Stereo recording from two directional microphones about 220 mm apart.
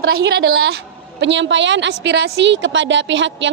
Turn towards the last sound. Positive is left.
turn(degrees=-55)  # may be behind; listen again after turning